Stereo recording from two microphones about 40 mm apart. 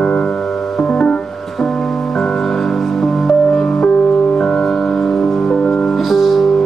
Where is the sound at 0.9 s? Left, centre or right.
Left.